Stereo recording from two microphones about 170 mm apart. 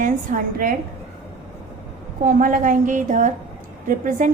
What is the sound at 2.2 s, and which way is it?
A woman's voice, 55° right (ahead or behind).